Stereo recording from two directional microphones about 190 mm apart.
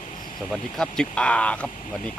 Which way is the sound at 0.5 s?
5° left (ahead or behind).